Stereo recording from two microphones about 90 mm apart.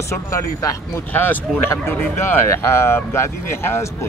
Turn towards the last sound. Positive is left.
turn(degrees=30)  # may be behind; listen again after turning